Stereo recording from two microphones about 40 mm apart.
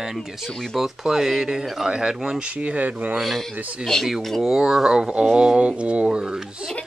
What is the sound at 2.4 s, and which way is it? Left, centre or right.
Speech, right.